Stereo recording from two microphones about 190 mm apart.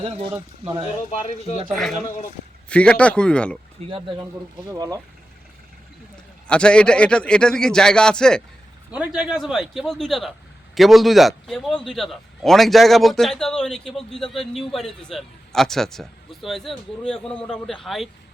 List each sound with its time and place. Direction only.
0.0 s speech: 30° right (ahead or behind)
2.6 s a man's voice: 5° left (ahead or behind)
3.8 s speech: 30° right (ahead or behind)
4.7 s speech: 20° right (ahead or behind)
6.5 s a man's voice: 5° left (ahead or behind)